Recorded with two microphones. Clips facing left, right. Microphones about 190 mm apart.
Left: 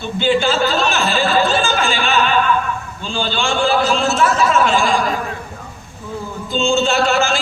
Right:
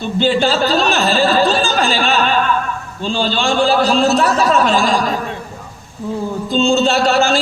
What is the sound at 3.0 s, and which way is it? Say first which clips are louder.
A man's voice: right 5 dB; 35° right (ahead or behind).